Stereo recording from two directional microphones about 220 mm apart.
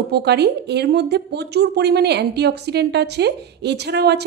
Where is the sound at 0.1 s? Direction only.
50° right (ahead or behind).